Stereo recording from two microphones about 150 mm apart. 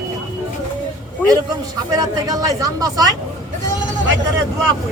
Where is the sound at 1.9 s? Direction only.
25° right (ahead or behind).